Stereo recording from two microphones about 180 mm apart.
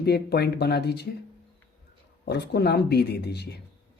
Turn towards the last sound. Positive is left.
turn(degrees=65)  # may be behind; listen again after turning